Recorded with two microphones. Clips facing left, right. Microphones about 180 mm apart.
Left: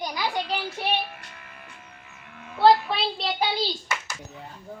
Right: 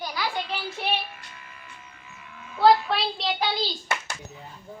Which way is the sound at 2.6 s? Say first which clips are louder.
Even; centre (ahead or behind).